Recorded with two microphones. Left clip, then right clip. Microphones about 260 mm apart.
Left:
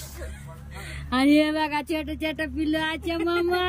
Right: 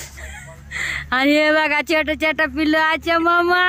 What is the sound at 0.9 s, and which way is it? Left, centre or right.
Speech, centre.